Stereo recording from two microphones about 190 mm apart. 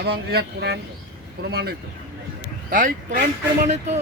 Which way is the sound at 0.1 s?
60° right (ahead or behind).